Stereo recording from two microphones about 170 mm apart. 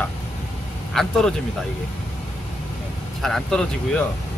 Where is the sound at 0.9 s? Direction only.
5° left (ahead or behind).